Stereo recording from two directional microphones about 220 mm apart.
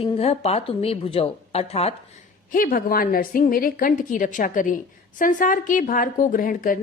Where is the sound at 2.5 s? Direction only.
40° left (ahead or behind).